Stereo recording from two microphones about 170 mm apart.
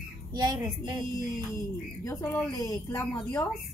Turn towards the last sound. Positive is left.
turn(degrees=20)  # may be behind; listen again after turning